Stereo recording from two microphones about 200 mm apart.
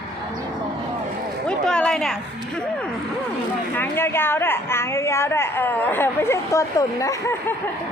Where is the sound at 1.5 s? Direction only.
5° left (ahead or behind).